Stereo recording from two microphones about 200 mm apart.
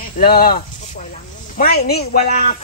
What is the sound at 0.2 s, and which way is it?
Speech, 45° left (ahead or behind).